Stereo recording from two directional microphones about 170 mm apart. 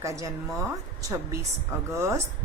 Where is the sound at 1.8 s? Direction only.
15° right (ahead or behind).